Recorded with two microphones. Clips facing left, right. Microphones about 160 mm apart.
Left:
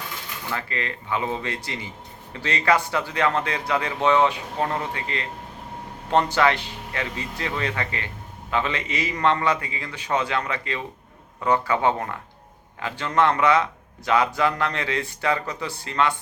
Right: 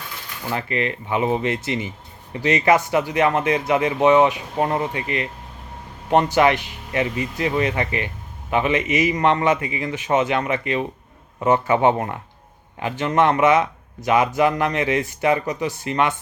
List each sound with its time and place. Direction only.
0.5 s speech: 20° right (ahead or behind)